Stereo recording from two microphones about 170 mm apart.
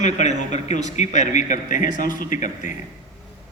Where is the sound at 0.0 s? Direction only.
45° left (ahead or behind).